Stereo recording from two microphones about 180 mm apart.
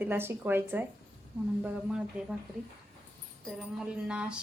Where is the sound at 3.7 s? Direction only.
5° right (ahead or behind).